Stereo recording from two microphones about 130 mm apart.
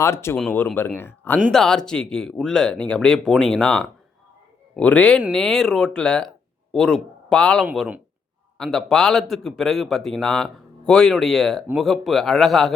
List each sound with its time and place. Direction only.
0.0 s speech: 20° left (ahead or behind)
1.5 s a man's voice: 5° left (ahead or behind)
7.6 s speech: 5° right (ahead or behind)
8.5 s speech: 5° left (ahead or behind)